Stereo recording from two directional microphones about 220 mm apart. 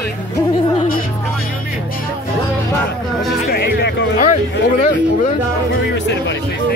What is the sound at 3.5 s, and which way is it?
Music, 45° left (ahead or behind).